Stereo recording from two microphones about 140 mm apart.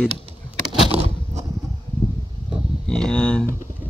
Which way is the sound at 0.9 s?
50° right (ahead or behind).